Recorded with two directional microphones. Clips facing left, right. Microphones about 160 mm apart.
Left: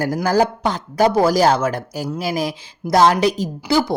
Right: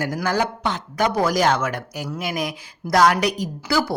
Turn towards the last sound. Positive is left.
turn(degrees=25)  # may be behind; listen again after turning